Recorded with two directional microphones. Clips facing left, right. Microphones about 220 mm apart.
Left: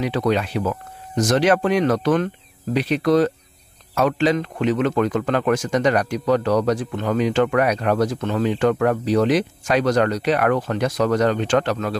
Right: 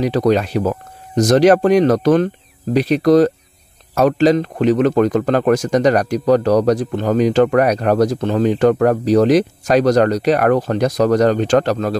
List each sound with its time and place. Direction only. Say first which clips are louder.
0.0 s a man's voice: right 5 dB; 40° right (ahead or behind)